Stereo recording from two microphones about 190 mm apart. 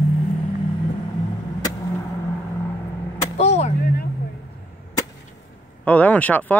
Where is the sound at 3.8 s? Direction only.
55° left (ahead or behind).